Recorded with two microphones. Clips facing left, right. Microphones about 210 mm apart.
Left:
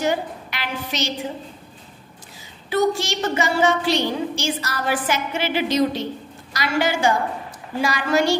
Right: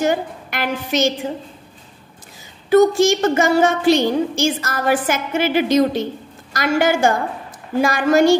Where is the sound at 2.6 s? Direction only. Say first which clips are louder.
Right 8 dB; 50° right (ahead or behind).